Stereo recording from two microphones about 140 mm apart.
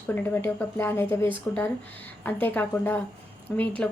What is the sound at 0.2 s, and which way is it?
A woman's voice, 15° left (ahead or behind).